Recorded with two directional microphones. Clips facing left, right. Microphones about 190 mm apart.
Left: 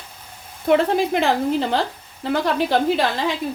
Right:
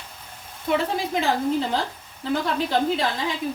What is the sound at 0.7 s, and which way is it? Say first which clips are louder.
Dishes: left 6 dB; 70° left (ahead or behind).